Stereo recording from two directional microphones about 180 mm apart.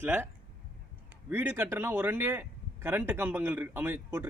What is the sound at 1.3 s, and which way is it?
Speech, 10° right (ahead or behind).